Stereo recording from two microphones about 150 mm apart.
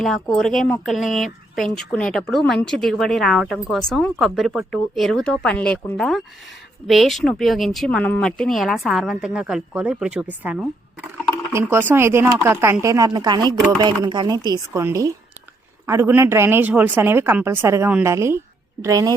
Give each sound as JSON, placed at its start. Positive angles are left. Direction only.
{"t": 0.0, "sound": "speech", "side_deg": 0}